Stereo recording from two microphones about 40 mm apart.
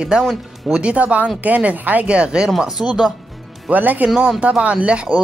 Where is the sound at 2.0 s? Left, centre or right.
Right.